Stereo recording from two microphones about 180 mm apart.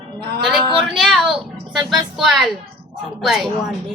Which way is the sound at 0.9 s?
Centre (ahead or behind).